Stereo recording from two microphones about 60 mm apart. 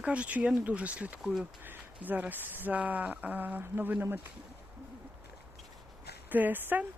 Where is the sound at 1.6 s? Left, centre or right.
Right.